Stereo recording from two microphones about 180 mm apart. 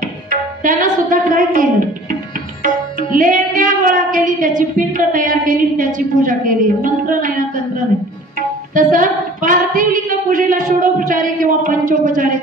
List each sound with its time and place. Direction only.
0.0 s tabla: 45° right (ahead or behind)
5.9 s a woman's voice: 45° right (ahead or behind)
8.7 s singing: 45° right (ahead or behind)